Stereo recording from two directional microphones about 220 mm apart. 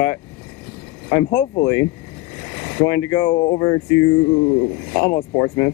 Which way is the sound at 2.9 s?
10° left (ahead or behind).